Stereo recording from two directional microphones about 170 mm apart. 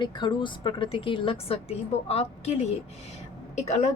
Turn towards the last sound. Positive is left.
turn(degrees=40)  # may be behind; listen again after turning